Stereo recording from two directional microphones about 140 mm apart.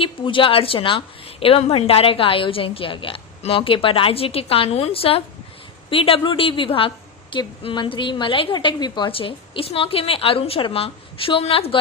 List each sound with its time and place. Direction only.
0.0 s a woman's voice: 40° left (ahead or behind)